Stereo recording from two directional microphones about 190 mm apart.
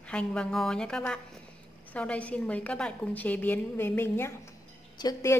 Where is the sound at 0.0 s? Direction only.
5° left (ahead or behind).